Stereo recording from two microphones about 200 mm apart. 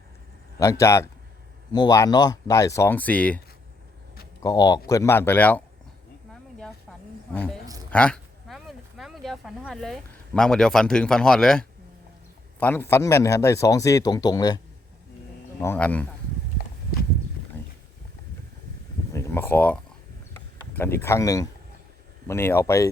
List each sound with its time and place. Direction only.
0.6 s speech: 15° left (ahead or behind)
4.4 s speech: 20° left (ahead or behind)
6.3 s snake: centre (ahead or behind)
7.9 s speech: 5° left (ahead or behind)
15.6 s speech: 10° left (ahead or behind)
19.1 s speech: 15° left (ahead or behind)
20.3 s a sound: 10° left (ahead or behind)
22.3 s speech: 10° left (ahead or behind)